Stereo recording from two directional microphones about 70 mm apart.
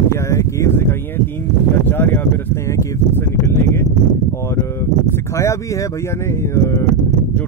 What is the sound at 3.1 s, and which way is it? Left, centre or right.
Speech, left.